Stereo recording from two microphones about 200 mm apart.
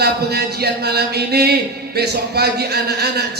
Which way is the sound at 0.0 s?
55° right (ahead or behind).